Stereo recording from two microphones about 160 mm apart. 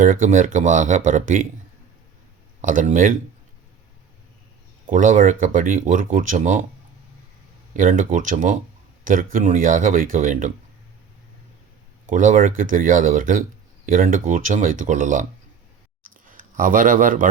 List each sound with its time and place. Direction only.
0.0 s speech: 55° right (ahead or behind)
2.6 s speech: 55° right (ahead or behind)
4.9 s speech: 55° right (ahead or behind)
7.8 s speech: 55° right (ahead or behind)
12.0 s speech: 55° right (ahead or behind)
16.3 s speech: 55° right (ahead or behind)